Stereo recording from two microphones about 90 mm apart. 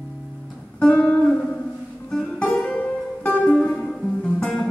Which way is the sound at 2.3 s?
15° left (ahead or behind).